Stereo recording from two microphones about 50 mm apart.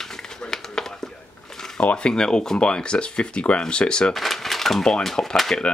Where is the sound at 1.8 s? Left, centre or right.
Left.